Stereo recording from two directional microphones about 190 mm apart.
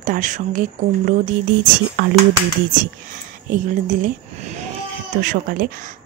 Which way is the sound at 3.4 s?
45° right (ahead or behind).